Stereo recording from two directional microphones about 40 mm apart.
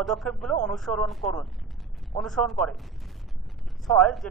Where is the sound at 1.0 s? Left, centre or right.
Centre.